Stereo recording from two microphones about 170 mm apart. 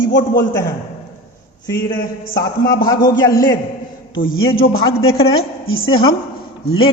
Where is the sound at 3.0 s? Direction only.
25° left (ahead or behind).